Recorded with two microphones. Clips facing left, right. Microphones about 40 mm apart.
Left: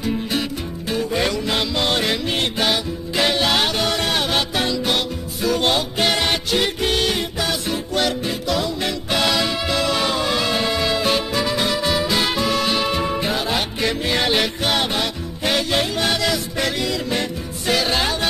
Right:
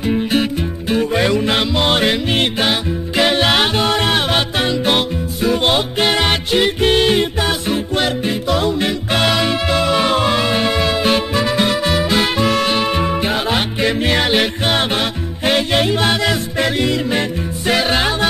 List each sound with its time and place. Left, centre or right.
0.0 s music: right
1.5 s music: right
5.9 s music: right
7.2 s music: right
9.2 s music: right